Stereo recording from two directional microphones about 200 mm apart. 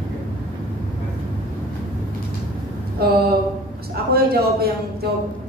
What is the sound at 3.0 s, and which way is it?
A man's voice, 50° right (ahead or behind).